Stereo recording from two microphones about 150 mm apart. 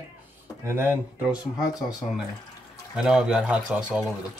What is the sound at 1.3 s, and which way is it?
Speech, 25° left (ahead or behind).